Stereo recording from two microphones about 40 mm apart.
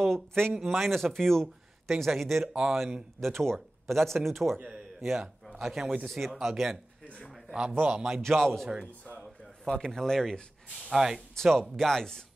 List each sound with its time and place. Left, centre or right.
0.0 s speech: centre
0.6 s speech: centre
1.1 s speech: centre
3.2 s speech: centre
5.0 s speech: centre
7.8 s a man's voice: centre
8.2 s speech: centre
9.2 s a sound: centre
9.9 s speech: centre
10.9 s speech: centre
11.4 s speech: centre